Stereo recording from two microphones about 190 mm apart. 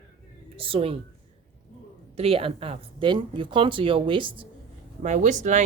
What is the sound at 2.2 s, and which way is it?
Speech, 30° right (ahead or behind).